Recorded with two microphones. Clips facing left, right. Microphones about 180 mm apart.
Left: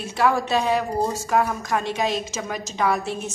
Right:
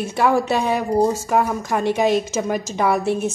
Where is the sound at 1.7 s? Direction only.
55° right (ahead or behind).